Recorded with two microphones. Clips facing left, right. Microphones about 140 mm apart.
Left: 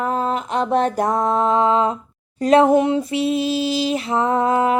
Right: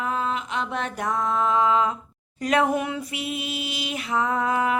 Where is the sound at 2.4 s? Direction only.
30° left (ahead or behind).